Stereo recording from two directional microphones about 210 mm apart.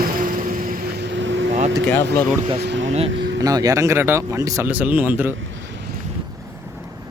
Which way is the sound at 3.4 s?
15° right (ahead or behind).